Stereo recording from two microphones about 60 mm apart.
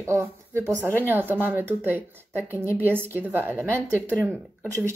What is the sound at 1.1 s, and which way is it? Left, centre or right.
Speech, right.